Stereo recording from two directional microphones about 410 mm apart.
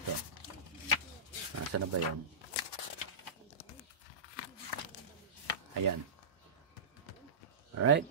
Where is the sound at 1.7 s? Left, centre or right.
Right.